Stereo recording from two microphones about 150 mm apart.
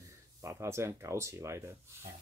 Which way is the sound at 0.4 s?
20° right (ahead or behind).